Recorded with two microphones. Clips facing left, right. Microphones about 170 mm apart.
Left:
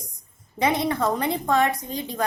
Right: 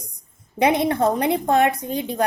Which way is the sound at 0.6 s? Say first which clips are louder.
Right 4 dB; 60° right (ahead or behind).